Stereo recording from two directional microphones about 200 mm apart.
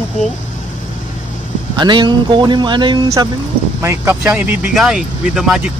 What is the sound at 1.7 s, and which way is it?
Speech, 20° right (ahead or behind).